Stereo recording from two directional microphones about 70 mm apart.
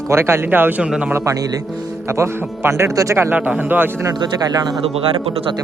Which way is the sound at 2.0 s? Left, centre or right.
Right.